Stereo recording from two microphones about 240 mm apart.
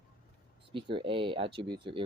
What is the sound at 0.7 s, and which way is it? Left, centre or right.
Speech, right.